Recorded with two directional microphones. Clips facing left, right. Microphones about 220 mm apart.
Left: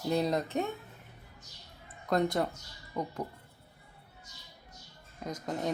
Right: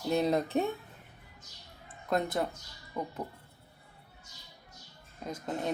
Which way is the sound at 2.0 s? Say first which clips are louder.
Left 2 dB; 5° right (ahead or behind).